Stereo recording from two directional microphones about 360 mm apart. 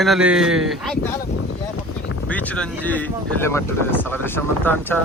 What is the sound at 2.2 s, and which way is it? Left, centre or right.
Speech, centre.